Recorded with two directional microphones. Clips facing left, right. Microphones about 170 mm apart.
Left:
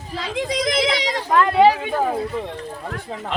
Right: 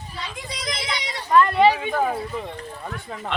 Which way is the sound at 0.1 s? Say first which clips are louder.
Left 12 dB; 90° left.